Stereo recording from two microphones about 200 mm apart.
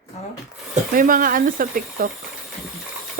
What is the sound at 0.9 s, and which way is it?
Speech, 45° right (ahead or behind).